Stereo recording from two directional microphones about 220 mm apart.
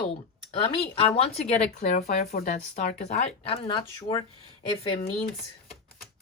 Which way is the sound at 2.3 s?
40° left (ahead or behind).